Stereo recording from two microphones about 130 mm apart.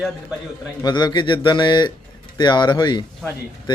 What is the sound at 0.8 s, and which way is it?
Speech, 35° left (ahead or behind).